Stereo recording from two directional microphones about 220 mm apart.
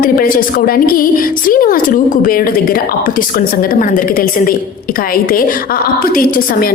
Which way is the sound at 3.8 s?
40° left (ahead or behind).